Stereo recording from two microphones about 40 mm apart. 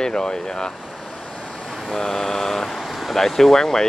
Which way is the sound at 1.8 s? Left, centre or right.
Centre.